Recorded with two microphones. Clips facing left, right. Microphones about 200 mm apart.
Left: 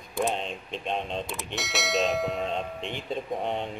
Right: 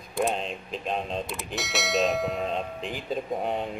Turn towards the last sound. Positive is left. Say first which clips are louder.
# right 1 dB
turn(degrees=-5)  # may be behind; listen again after turning